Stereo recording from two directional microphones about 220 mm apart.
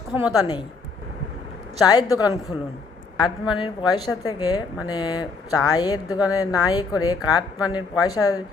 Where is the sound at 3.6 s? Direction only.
20° left (ahead or behind).